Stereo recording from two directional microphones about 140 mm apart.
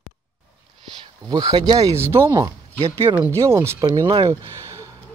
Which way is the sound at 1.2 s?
25° right (ahead or behind).